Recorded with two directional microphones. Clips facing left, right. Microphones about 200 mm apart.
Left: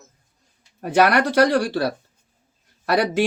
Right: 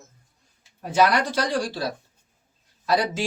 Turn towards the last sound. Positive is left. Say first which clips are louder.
# left 4 dB
turn(degrees=65)  # may be behind; listen again after turning